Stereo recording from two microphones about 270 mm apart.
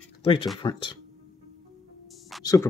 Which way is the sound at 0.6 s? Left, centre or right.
Centre.